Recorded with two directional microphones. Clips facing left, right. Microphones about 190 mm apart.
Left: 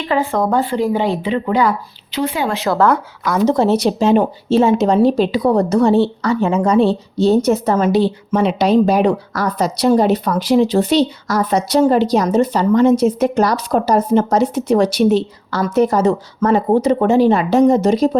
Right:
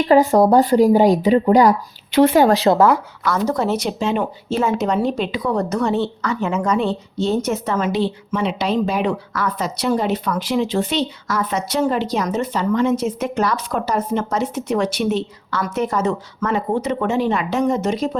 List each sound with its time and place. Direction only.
0.0 s speech: 40° right (ahead or behind)
2.1 s a woman's voice: 50° right (ahead or behind)
3.2 s speech: 15° left (ahead or behind)
3.5 s speech: 30° left (ahead or behind)